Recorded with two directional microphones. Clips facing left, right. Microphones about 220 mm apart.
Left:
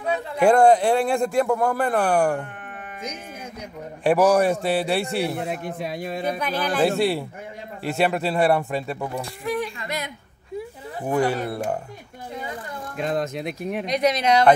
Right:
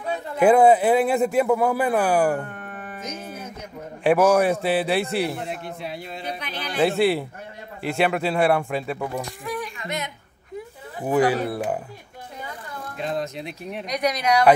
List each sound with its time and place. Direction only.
0.4 s speech: 5° right (ahead or behind)
4.0 s speech: centre (ahead or behind)
5.5 s a man's voice: 50° left (ahead or behind)
7.0 s speech: centre (ahead or behind)
9.2 s speech: 25° left (ahead or behind)
11.1 s speech: 5° right (ahead or behind)
13.0 s a man's voice: 50° left (ahead or behind)
13.8 s speech: 25° left (ahead or behind)